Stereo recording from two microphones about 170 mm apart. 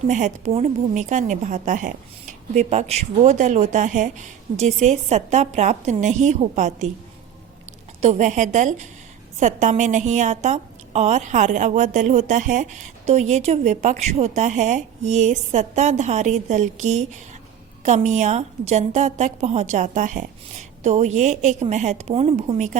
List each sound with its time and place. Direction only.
0.1 s a woman's voice: 45° right (ahead or behind)
8.0 s a woman's voice: 45° right (ahead or behind)